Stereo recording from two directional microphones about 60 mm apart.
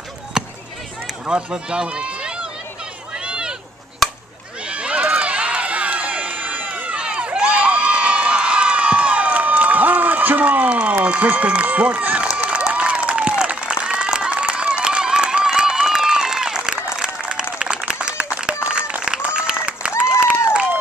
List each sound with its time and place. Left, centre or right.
0.3 s basketball bounce: centre
1.2 s speech: centre
3.2 s a sound: centre
4.6 s run: centre
11.1 s speech: right
12.4 s applause: centre
20.0 s a sound: centre